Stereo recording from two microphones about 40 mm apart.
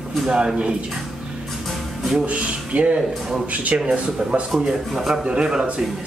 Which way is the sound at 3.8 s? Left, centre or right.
Right.